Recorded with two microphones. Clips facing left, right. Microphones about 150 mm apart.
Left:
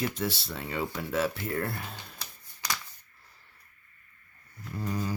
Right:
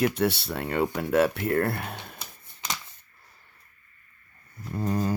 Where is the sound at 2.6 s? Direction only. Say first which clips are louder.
Right 1 dB; 20° right (ahead or behind).